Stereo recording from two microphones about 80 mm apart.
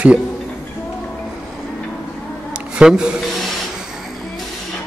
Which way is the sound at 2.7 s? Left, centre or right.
Centre.